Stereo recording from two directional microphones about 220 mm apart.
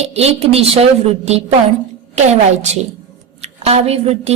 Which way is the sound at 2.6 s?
30° right (ahead or behind).